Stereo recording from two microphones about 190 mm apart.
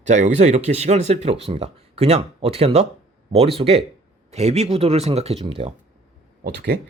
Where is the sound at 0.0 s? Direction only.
40° right (ahead or behind).